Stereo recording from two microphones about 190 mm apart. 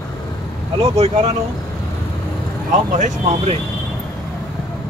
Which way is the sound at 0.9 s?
35° right (ahead or behind).